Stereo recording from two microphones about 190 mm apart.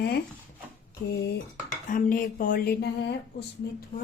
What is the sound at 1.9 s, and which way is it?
A woman's voice, 45° left (ahead or behind).